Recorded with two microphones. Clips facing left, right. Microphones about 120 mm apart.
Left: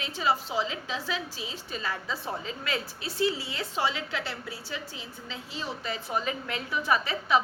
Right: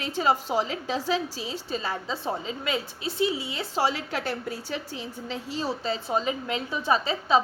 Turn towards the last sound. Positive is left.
turn(degrees=-25)  # may be behind; listen again after turning